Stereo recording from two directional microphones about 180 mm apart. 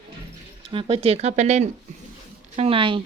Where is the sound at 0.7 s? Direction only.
30° right (ahead or behind).